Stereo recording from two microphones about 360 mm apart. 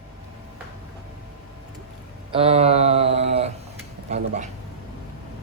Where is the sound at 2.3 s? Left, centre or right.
Centre.